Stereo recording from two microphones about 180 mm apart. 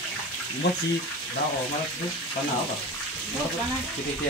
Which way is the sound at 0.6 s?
65° left (ahead or behind).